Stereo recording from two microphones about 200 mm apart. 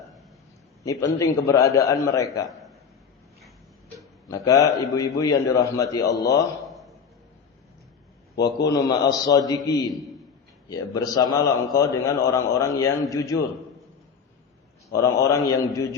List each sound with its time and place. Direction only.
0.9 s a man's voice: 15° left (ahead or behind)
4.3 s a man's voice: 15° left (ahead or behind)
6.7 s a sound: centre (ahead or behind)
8.4 s a man's voice: 20° left (ahead or behind)
14.9 s a man's voice: 15° left (ahead or behind)